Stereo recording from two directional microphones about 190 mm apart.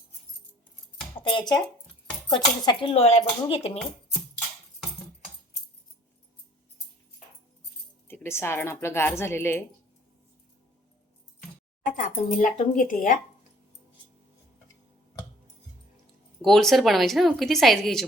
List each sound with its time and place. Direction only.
1.3 s speech: 25° left (ahead or behind)
8.0 s speech: 10° left (ahead or behind)
11.9 s speech: 40° left (ahead or behind)
16.4 s speech: centre (ahead or behind)